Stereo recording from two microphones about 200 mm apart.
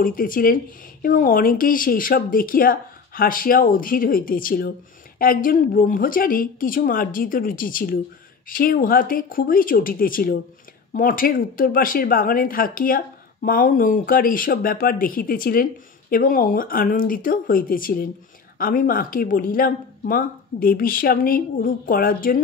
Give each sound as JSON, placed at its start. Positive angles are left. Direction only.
{"t": 0.0, "sound": "speech", "side_deg": 45}